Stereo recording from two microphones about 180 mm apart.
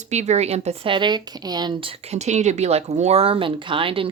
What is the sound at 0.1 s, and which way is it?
Speech, 40° right (ahead or behind).